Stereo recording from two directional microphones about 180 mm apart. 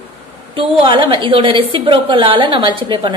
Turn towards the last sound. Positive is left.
turn(degrees=-25)  # may be behind; listen again after turning